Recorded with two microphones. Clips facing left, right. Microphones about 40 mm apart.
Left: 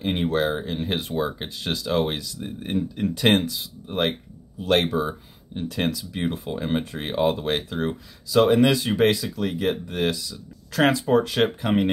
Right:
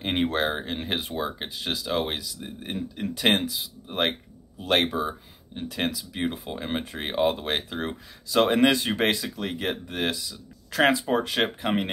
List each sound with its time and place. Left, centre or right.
0.0 s speech: right
0.8 s speech: centre
4.8 s speech: centre